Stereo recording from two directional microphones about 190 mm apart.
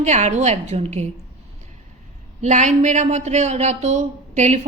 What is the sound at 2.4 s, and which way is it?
A woman's voice, 40° right (ahead or behind).